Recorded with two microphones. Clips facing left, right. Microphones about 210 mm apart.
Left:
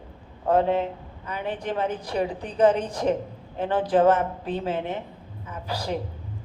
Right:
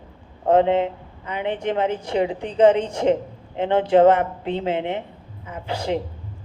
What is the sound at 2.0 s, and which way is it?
Speech, 20° right (ahead or behind).